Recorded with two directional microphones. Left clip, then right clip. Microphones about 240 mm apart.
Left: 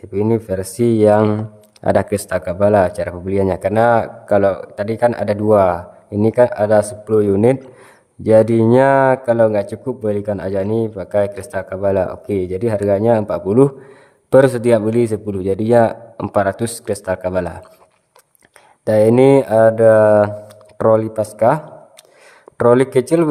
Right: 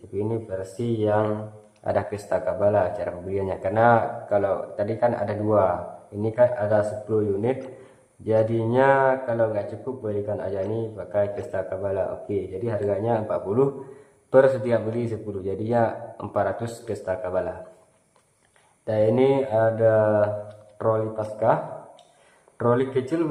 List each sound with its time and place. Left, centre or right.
0.1 s speech: left
18.9 s speech: left